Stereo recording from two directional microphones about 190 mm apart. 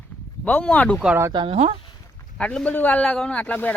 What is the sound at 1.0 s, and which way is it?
Speech, 10° right (ahead or behind).